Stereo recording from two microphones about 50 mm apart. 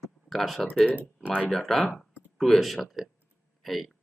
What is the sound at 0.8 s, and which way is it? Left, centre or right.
Speech, right.